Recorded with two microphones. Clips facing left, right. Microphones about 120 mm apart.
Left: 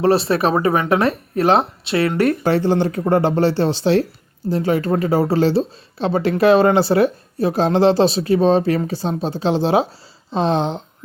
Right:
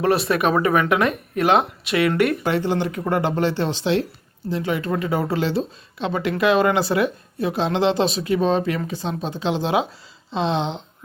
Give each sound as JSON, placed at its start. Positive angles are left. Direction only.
{"t": 0.0, "sound": "speech", "side_deg": 30}